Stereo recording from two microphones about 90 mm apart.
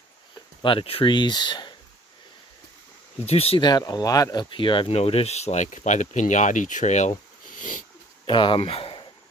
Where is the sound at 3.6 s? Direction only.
50° left (ahead or behind); by 5.6 s 90° left.